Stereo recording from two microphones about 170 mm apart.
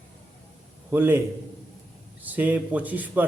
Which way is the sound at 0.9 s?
10° right (ahead or behind).